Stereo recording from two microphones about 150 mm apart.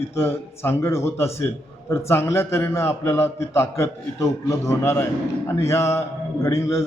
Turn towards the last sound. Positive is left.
turn(degrees=20)  # may be behind; listen again after turning